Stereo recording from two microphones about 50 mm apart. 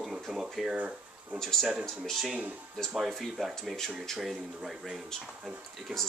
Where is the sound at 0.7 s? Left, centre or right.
Right.